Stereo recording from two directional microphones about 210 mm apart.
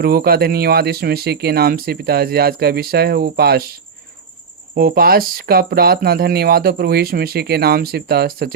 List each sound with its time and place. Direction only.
0.0 s speech: 45° right (ahead or behind)
4.7 s speech: 45° right (ahead or behind)